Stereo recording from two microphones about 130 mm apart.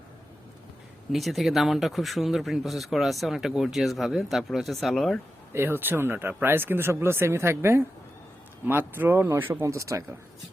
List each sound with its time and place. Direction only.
1.1 s speech: centre (ahead or behind)
5.5 s speech: 15° right (ahead or behind)